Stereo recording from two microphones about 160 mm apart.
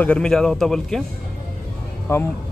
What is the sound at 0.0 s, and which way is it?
A man's voice, 5° left (ahead or behind).